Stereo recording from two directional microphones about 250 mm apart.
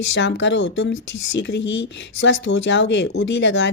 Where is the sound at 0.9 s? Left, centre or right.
Left.